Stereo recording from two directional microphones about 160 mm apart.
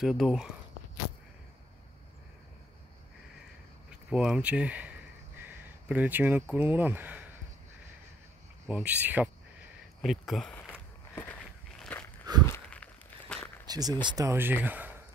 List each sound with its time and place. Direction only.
0.0 s speech: centre (ahead or behind)
4.1 s speech: 5° right (ahead or behind)
8.6 s speech: 10° right (ahead or behind)
10.0 s walk: centre (ahead or behind)
13.7 s speech: 25° right (ahead or behind)